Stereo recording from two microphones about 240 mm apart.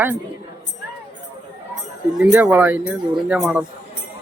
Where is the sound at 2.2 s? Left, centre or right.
Centre.